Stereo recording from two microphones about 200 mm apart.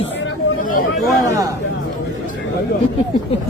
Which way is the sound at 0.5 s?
45° left (ahead or behind).